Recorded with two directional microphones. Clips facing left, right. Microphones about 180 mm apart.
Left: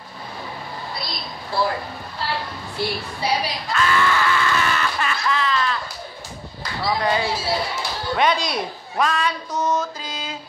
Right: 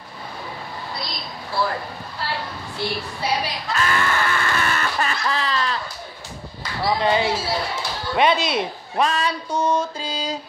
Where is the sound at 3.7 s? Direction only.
50° right (ahead or behind).